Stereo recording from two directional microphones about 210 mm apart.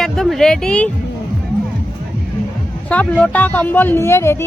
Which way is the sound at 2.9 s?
5° left (ahead or behind).